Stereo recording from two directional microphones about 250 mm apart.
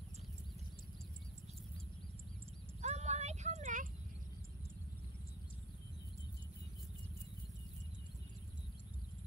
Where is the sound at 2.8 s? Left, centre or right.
Right.